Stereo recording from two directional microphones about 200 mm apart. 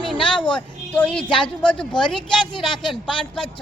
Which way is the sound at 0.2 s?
5° left (ahead or behind).